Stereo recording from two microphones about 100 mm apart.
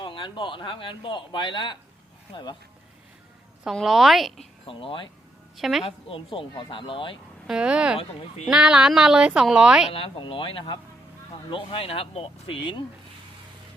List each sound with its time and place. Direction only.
0.0 s speech: 55° left (ahead or behind)
3.8 s a woman's voice: centre (ahead or behind)
4.6 s speech: 60° left (ahead or behind)
5.5 s a woman's voice: centre (ahead or behind)
5.8 s speech: 60° left (ahead or behind)
7.4 s speech: 10° right (ahead or behind)
7.9 s speech: 70° left (ahead or behind)
8.4 s speech: 5° right (ahead or behind)
9.9 s speech: 60° left (ahead or behind); by 12.3 s 75° left (ahead or behind)